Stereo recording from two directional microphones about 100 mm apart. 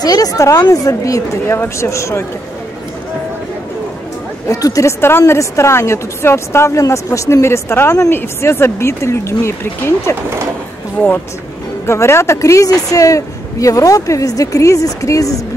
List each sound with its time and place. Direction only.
0.0 s speech: 40° left (ahead or behind)
4.5 s a woman's voice: 35° left (ahead or behind)
5.0 s a woman's voice: 25° left (ahead or behind)
11.8 s speech: 25° left (ahead or behind)